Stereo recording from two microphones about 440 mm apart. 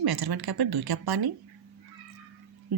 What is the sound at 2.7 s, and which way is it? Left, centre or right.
Music, right.